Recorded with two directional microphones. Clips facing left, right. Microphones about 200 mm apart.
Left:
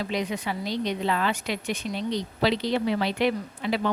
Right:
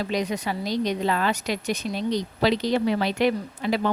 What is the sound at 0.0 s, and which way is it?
A woman's voice, 40° right (ahead or behind).